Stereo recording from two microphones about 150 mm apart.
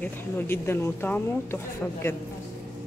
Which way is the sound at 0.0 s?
15° left (ahead or behind).